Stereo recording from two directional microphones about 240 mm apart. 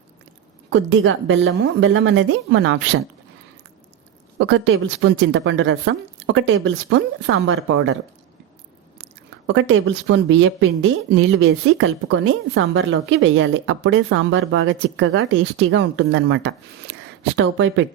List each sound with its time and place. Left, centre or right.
0.7 s a woman's voice: right
4.4 s a woman's voice: right
9.5 s a woman's voice: right